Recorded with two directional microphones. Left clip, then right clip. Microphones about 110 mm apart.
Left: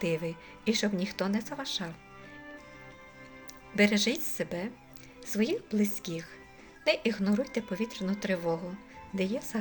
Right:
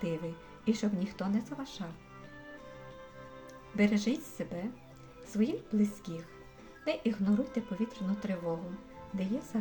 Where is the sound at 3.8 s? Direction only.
15° left (ahead or behind).